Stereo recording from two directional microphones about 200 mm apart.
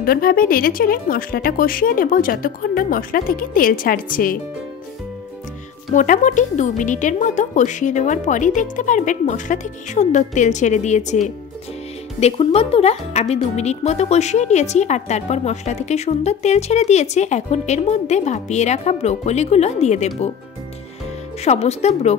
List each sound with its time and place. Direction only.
0.0 s a woman's voice: 45° left (ahead or behind)
5.9 s a woman's voice: 40° left (ahead or behind)
21.5 s a woman's voice: 35° left (ahead or behind)